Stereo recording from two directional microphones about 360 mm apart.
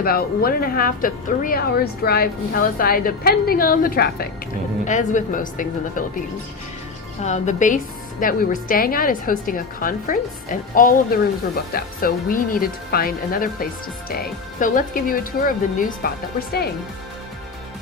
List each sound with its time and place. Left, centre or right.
0.0 s speech: left